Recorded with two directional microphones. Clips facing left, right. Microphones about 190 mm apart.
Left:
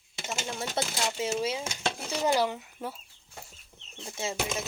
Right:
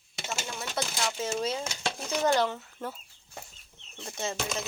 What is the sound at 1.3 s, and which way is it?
Speech, 5° left (ahead or behind).